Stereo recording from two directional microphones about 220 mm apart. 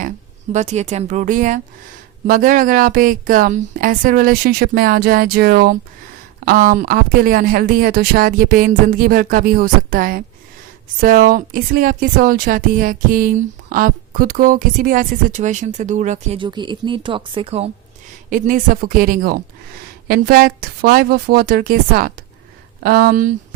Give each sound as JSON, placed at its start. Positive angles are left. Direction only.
{"t": 0.5, "sound": "a woman's voice", "side_deg": -30}
{"t": 18.3, "sound": "a woman's voice", "side_deg": -35}